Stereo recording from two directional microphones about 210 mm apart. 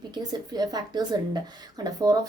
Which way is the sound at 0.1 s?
20° right (ahead or behind).